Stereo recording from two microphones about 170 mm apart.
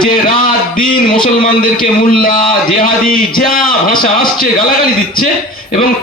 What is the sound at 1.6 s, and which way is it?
A man's voice, 60° left (ahead or behind).